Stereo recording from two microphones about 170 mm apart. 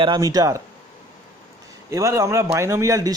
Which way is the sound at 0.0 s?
25° right (ahead or behind).